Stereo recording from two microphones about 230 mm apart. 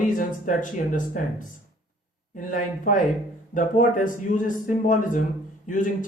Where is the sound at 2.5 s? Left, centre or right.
Left.